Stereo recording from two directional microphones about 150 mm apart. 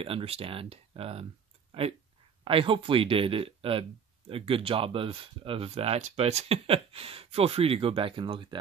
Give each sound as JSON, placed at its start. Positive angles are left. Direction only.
{"t": 0.0, "sound": "speech", "side_deg": -40}